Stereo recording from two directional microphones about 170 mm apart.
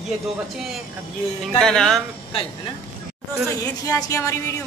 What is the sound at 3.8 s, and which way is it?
Speech, 20° left (ahead or behind).